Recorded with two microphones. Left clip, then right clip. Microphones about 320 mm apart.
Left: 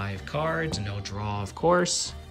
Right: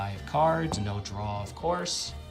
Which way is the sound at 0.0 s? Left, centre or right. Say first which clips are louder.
Right 4 dB; centre.